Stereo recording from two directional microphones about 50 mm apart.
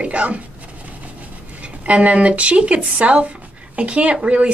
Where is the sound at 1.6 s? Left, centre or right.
Right.